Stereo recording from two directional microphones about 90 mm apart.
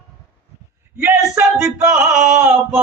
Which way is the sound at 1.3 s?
30° right (ahead or behind).